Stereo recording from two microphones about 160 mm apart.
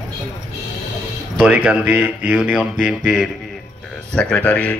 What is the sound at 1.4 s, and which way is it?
Speech, 10° right (ahead or behind).